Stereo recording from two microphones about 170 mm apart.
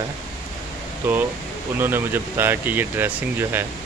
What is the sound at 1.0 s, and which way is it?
Speech, 15° right (ahead or behind).